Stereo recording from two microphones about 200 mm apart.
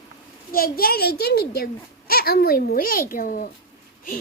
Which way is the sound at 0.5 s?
50° left (ahead or behind).